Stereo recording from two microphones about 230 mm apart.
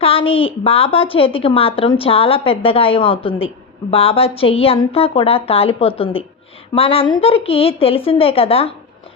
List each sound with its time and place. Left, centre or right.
0.0 s a woman's voice: left